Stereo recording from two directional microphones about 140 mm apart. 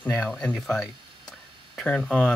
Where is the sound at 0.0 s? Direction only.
10° left (ahead or behind).